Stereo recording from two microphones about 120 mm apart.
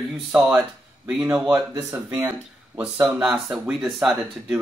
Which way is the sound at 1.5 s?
20° right (ahead or behind).